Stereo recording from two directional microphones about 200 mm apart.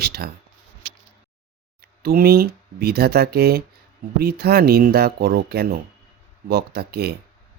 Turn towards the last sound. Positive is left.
turn(degrees=-50)  # may be behind; listen again after turning